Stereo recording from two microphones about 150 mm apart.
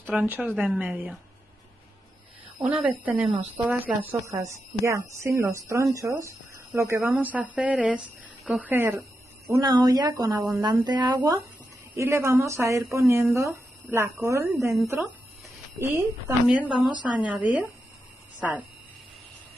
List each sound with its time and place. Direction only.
0.0 s speech: 10° right (ahead or behind)
2.6 s speech: 10° right (ahead or behind)
9.5 s speech: 25° right (ahead or behind)
15.8 s speech: 15° right (ahead or behind)